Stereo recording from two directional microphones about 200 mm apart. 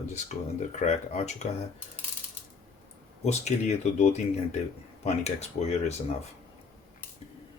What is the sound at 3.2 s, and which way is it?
Speech, 35° left (ahead or behind).